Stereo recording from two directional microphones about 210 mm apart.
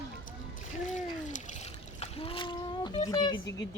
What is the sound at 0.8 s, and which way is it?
Splash, 35° left (ahead or behind).